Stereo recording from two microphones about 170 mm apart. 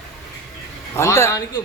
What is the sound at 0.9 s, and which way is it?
Speech, 15° left (ahead or behind).